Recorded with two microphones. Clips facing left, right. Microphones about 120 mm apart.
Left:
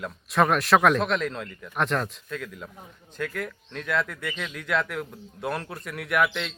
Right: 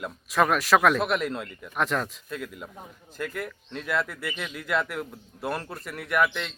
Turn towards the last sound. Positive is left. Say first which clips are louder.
# even
turn(degrees=0)  # may be behind; listen again after turning